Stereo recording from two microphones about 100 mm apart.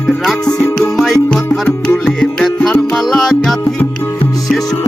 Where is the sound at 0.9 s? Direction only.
Centre (ahead or behind).